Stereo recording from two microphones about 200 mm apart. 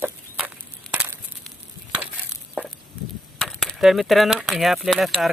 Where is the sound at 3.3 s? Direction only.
5° left (ahead or behind).